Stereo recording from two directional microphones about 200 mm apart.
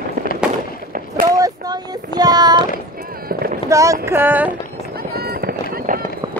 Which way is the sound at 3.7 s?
15° right (ahead or behind).